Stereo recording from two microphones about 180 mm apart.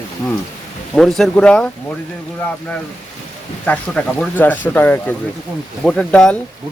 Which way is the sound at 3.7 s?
10° left (ahead or behind).